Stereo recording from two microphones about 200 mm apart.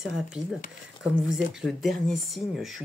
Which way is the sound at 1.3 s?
Centre (ahead or behind).